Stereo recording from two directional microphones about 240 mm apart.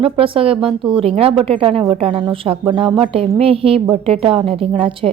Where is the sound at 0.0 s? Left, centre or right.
Right.